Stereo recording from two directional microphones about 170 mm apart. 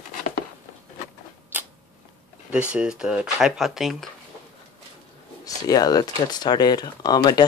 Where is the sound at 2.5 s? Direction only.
5° right (ahead or behind).